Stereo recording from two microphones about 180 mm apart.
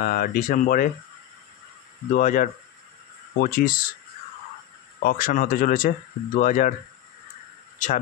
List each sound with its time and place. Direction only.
0.0 s speech: 55° left (ahead or behind)
2.1 s speech: 45° left (ahead or behind)
5.0 s speech: 50° left (ahead or behind)
7.8 s speech: 45° left (ahead or behind)